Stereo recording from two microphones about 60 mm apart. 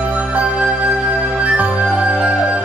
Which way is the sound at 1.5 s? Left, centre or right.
Right.